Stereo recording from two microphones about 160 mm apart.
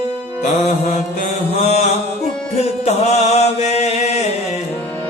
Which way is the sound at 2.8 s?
45° left (ahead or behind).